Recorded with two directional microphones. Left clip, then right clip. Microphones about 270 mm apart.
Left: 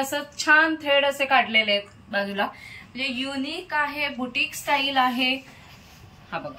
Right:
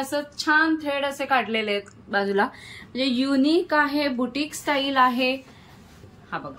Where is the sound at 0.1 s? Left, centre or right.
Centre.